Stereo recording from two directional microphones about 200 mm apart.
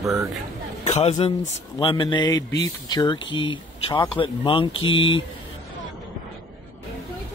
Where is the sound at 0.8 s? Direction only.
30° left (ahead or behind).